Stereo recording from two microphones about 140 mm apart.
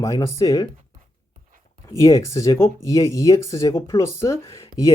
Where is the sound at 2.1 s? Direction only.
25° left (ahead or behind).